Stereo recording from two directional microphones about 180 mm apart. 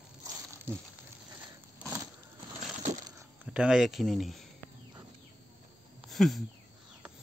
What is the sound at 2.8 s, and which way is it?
Crushing, 40° right (ahead or behind).